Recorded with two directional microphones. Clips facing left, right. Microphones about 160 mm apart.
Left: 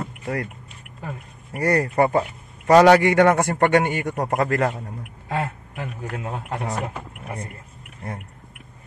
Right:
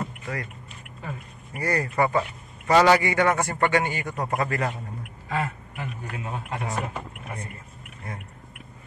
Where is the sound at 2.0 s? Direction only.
35° left (ahead or behind).